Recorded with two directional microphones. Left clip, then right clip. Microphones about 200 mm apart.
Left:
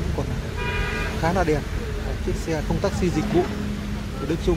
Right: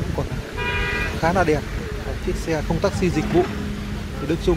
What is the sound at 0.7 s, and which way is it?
Vehicle, 35° left (ahead or behind).